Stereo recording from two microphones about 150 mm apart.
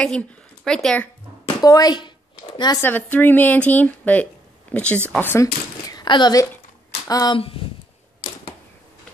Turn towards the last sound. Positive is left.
turn(degrees=40)  # may be behind; listen again after turning